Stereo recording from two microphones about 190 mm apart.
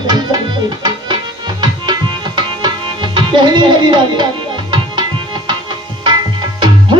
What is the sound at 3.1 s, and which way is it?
Music, 25° right (ahead or behind).